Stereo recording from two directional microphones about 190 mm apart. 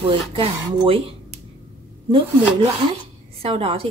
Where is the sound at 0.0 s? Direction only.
30° right (ahead or behind).